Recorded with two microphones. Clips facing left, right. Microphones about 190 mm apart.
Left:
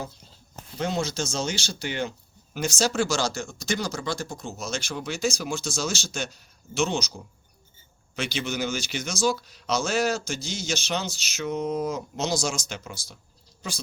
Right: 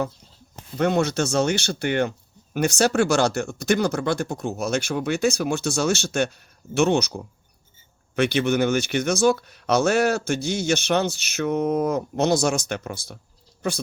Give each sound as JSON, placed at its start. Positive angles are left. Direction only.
{"t": 0.8, "sound": "speech", "side_deg": -60}